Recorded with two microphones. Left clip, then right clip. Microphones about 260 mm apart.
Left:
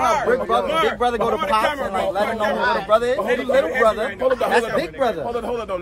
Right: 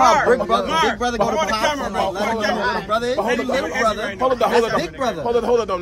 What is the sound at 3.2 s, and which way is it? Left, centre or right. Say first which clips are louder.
Speech: left 2 dB; right.